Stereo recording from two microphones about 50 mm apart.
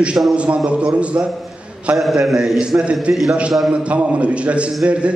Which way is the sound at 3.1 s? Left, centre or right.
Right.